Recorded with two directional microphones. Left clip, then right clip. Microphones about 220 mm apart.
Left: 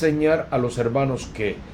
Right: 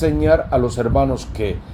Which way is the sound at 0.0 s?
35° right (ahead or behind).